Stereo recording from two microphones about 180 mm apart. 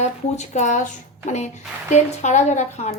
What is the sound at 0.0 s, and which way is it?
Speech, 40° left (ahead or behind).